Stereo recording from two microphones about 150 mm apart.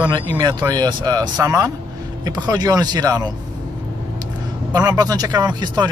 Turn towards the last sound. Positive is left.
turn(degrees=-25)  # may be behind; listen again after turning